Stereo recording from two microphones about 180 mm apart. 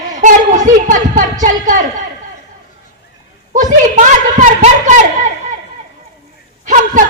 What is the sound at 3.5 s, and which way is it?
A woman's voice, 45° right (ahead or behind).